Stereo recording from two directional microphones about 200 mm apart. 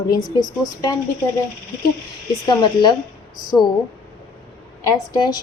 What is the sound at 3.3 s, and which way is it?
Speech, centre (ahead or behind).